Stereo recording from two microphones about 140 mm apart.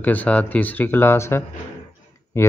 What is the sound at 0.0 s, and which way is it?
Speech, 10° left (ahead or behind).